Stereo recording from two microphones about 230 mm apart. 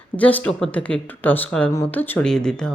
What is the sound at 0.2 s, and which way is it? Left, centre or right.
Speech, centre.